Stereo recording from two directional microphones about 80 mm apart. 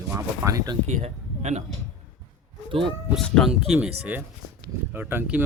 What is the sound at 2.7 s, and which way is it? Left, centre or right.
Speech, right.